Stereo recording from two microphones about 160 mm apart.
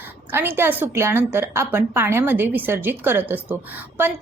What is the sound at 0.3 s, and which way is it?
A woman's voice, 15° right (ahead or behind).